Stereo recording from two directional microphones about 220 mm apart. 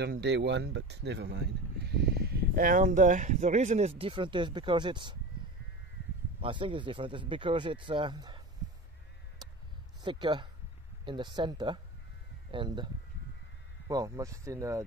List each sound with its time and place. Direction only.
0.0 s speech: 50° right (ahead or behind); by 5.1 s 20° right (ahead or behind)
6.4 s speech: 20° right (ahead or behind)
10.0 s speech: 20° right (ahead or behind)